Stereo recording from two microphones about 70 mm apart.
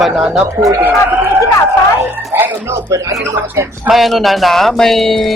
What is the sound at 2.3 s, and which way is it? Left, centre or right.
Music, right.